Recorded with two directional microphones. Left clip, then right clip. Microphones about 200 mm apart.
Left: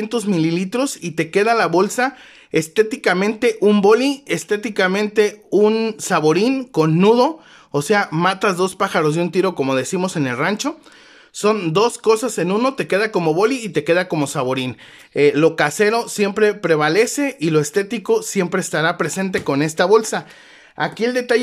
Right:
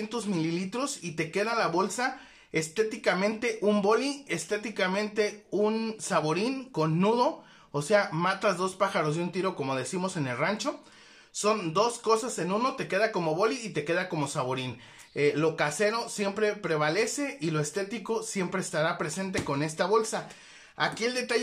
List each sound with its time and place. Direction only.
0.1 s speech: 50° left (ahead or behind)
20.7 s speech: 40° left (ahead or behind)